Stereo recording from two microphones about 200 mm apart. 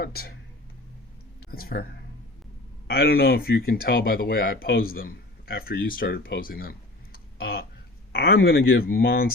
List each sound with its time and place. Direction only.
0.0 s speech: 50° left (ahead or behind)
1.5 s speech: 50° left (ahead or behind)